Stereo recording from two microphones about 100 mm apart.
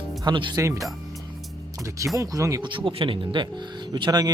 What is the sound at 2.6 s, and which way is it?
Speech, 55° right (ahead or behind).